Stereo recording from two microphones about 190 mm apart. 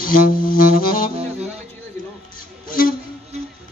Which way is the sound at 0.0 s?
45° left (ahead or behind).